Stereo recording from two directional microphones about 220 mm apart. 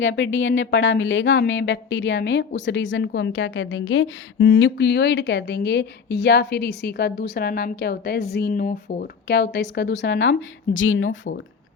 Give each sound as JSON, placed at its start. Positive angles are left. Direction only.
{"t": 0.0, "sound": "speech", "side_deg": 60}